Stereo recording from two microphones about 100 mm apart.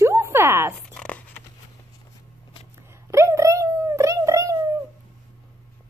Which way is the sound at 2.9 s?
30° right (ahead or behind).